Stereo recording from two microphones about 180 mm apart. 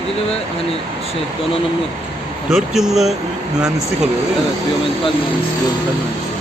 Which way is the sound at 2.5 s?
Centre (ahead or behind).